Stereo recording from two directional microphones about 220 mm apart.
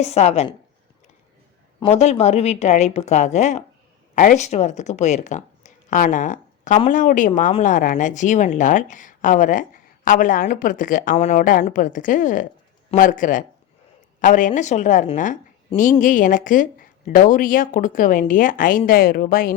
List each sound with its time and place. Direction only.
0.0 s a woman's voice: 30° left (ahead or behind)
1.8 s speech: 30° left (ahead or behind)